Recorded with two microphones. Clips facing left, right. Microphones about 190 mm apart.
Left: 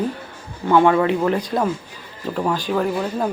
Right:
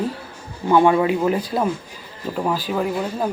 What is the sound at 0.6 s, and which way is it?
Speech, 15° right (ahead or behind).